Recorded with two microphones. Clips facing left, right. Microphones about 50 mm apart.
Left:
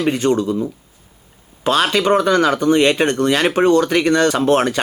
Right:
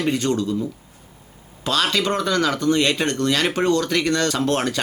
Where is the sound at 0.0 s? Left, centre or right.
Left.